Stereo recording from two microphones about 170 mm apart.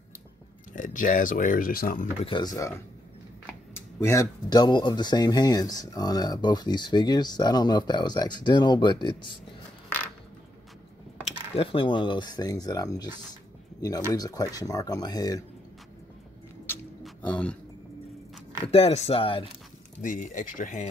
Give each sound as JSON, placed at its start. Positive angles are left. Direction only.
{"t": 0.7, "sound": "speech", "side_deg": 50}
{"t": 2.2, "sound": "speech", "side_deg": 25}
{"t": 3.7, "sound": "speech", "side_deg": 15}
{"t": 11.2, "sound": "speech", "side_deg": 35}
{"t": 17.2, "sound": "speech", "side_deg": 10}
{"t": 18.7, "sound": "speech", "side_deg": 35}
{"t": 20.0, "sound": "speech", "side_deg": 50}